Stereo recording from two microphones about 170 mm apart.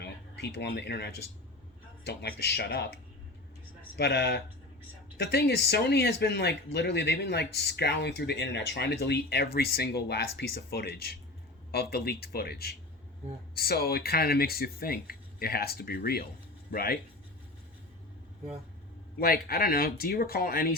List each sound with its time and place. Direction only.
0.0 s speech: 80° left
3.9 s speech: 80° left; by 17.0 s 60° left (ahead or behind)
19.2 s speech: 60° left (ahead or behind)